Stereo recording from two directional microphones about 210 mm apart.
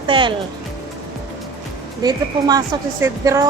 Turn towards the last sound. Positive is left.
turn(degrees=-15)  # may be behind; listen again after turning